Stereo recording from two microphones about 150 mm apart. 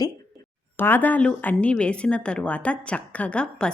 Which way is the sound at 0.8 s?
15° left (ahead or behind).